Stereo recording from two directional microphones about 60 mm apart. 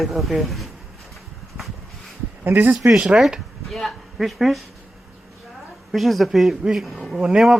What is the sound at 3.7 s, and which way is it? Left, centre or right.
Speech, centre.